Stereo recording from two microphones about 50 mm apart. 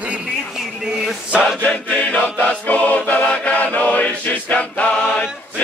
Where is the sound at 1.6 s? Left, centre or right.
Left.